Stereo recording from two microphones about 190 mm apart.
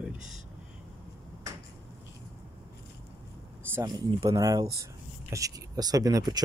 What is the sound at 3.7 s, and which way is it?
Speech, 20° right (ahead or behind).